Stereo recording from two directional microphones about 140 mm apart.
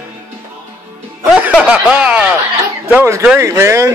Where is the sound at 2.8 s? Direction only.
20° right (ahead or behind).